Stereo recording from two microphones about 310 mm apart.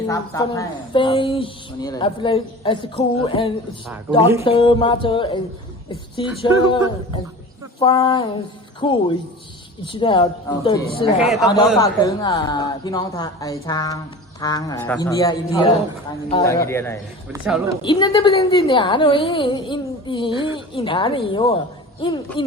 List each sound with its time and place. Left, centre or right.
0.1 s a woman's voice: centre
11.2 s speech: centre
11.8 s a woman's voice: centre
17.2 s speech: centre
17.8 s a woman's voice: centre